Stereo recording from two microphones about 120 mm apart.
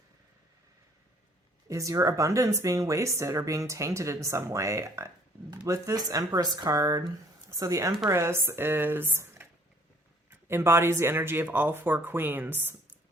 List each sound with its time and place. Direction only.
1.6 s speech: 25° right (ahead or behind)